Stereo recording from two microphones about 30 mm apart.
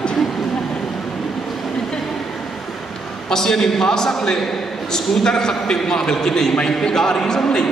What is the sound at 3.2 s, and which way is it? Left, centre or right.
A man's voice, centre.